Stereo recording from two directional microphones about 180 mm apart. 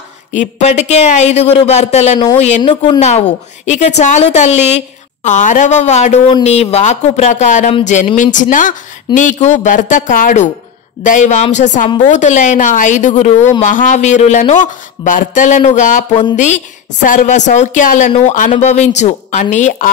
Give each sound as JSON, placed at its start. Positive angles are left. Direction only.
{"t": 0.4, "sound": "a woman's voice", "side_deg": 40}
{"t": 2.7, "sound": "a woman's voice", "side_deg": 25}
{"t": 3.0, "sound": "a woman's voice", "side_deg": 40}